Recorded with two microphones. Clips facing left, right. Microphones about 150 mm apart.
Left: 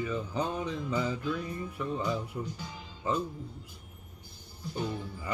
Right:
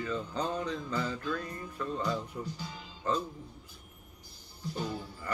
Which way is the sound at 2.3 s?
25° left (ahead or behind).